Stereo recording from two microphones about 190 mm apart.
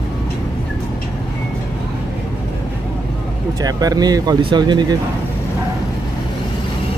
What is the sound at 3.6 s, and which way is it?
Speech, 20° right (ahead or behind).